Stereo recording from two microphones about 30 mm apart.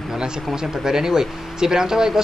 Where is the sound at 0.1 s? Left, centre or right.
Right.